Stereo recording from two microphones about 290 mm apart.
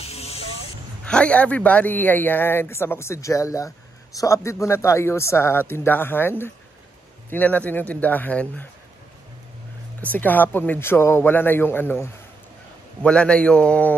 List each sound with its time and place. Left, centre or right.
0.0 s vehicle: left
1.0 s a man's voice: centre
10.1 s a man's voice: centre